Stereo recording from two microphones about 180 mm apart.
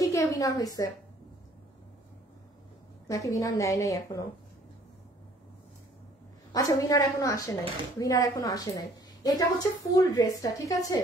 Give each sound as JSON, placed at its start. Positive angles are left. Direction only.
{"t": 0.0, "sound": "a woman's voice", "side_deg": 20}
{"t": 3.1, "sound": "a woman's voice", "side_deg": 20}
{"t": 6.5, "sound": "a woman's voice", "side_deg": 20}